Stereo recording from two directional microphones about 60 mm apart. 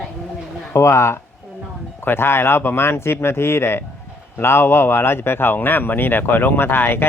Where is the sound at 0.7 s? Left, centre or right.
Left.